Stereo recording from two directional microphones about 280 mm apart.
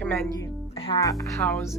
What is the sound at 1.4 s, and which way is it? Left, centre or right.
Speech, centre.